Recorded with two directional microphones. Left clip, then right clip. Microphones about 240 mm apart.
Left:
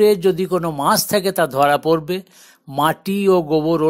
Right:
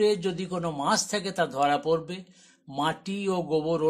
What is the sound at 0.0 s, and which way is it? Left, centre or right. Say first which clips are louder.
Speech: left 11 dB; left.